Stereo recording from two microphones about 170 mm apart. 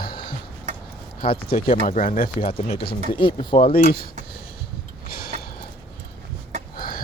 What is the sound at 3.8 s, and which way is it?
Speech, 60° left (ahead or behind).